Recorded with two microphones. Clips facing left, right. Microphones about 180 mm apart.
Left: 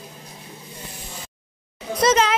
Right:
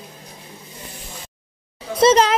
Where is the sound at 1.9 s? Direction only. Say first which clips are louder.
Right 4 dB; 30° right (ahead or behind).